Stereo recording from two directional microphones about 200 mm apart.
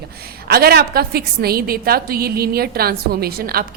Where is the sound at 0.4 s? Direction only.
50° right (ahead or behind).